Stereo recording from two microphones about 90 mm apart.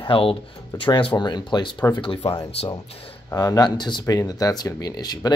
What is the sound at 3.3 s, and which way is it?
Speech, 40° left (ahead or behind).